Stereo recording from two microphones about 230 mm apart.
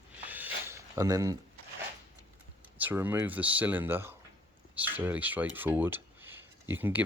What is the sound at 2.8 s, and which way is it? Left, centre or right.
Speech, centre.